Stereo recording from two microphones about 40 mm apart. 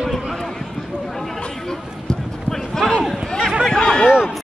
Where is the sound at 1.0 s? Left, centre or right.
Centre.